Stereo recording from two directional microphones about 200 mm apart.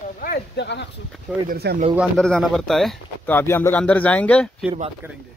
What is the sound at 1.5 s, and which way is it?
Speech, 55° right (ahead or behind).